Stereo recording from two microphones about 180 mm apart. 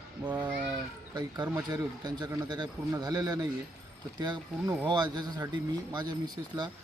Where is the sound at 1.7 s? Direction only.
25° right (ahead or behind).